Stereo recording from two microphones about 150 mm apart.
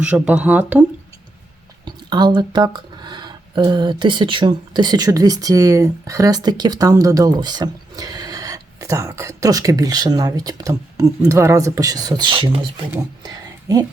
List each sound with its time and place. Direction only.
0.0 s speech: 10° right (ahead or behind)
1.8 s speech: 30° right (ahead or behind)
13.2 s a sound: 25° right (ahead or behind)